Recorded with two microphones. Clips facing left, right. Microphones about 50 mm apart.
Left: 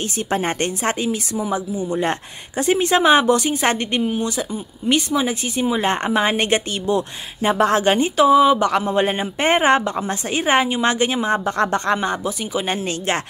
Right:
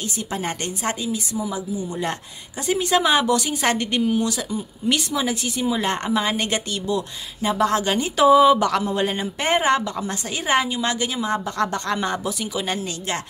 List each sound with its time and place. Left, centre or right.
0.3 s a woman's voice: left
1.9 s speech: left
8.2 s speech: centre
8.8 s speech: left
12.0 s speech: centre